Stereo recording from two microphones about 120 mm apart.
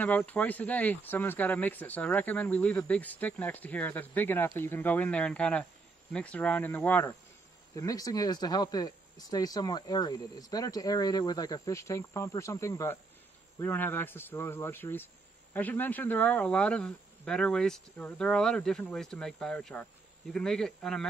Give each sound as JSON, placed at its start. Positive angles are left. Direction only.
{"t": 0.0, "sound": "speech", "side_deg": 15}
{"t": 7.7, "sound": "speech", "side_deg": 30}